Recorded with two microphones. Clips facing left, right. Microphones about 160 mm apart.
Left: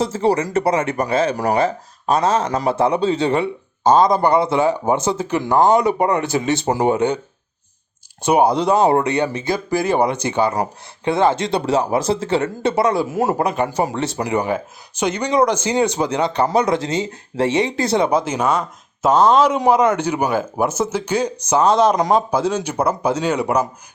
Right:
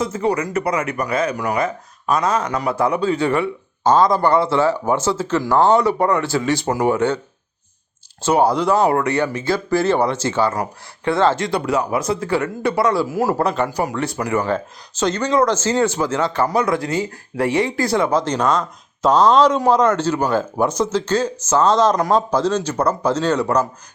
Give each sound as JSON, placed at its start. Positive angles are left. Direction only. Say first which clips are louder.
{"t": 0.0, "sound": "speech", "louder": "left 2 dB", "side_deg": 30}
{"t": 8.2, "sound": "speech", "louder": "left 1 dB", "side_deg": 15}